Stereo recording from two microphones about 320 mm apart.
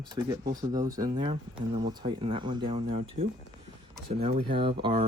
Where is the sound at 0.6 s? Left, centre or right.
Centre.